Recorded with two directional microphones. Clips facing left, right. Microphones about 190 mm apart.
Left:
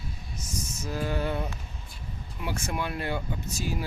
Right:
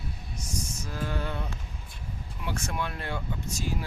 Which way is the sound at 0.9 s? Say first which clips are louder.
Left 5 dB; 10° left (ahead or behind).